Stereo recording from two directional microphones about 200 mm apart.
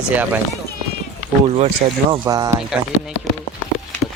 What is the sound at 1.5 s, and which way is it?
Speech, 30° right (ahead or behind).